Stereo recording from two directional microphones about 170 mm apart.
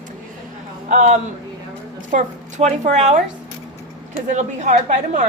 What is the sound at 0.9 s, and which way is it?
A woman's voice, 45° right (ahead or behind).